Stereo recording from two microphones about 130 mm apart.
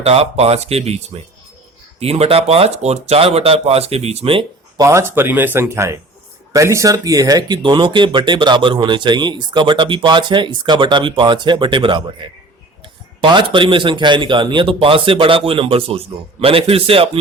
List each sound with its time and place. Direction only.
0.0 s speech: 50° right (ahead or behind)
4.8 s speech: 20° right (ahead or behind); by 17.1 s 45° right (ahead or behind)